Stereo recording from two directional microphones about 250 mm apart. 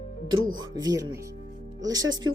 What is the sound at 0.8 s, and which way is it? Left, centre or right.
Speech, centre.